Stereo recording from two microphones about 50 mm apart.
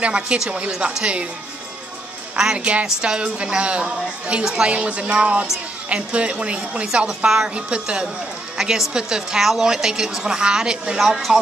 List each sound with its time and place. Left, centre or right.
0.0 s a woman's voice: right
2.3 s speech: centre
2.6 s a woman's voice: right
7.2 s a woman's voice: centre
8.5 s a woman's voice: centre